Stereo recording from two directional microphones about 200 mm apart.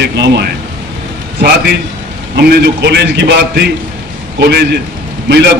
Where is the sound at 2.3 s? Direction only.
55° right (ahead or behind).